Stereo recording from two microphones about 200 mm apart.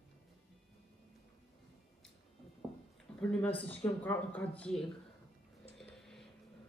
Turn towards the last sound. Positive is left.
turn(degrees=0)  # may be behind; listen again after turning